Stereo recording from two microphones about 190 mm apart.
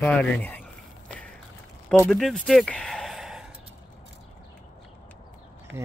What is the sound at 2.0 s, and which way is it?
Speech, 5° left (ahead or behind).